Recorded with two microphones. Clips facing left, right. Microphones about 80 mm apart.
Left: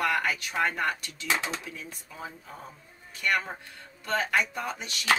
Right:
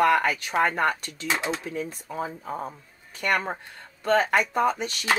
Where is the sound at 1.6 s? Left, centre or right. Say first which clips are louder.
Right 10 dB; right.